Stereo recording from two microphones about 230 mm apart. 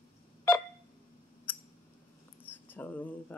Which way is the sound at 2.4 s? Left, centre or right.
Centre.